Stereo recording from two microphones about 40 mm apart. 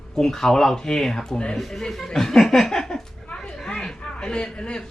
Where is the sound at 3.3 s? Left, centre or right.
Centre.